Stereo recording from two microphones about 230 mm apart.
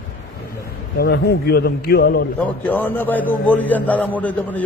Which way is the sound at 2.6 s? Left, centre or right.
Centre.